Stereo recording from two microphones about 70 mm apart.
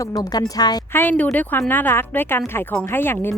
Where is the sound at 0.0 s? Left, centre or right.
Left.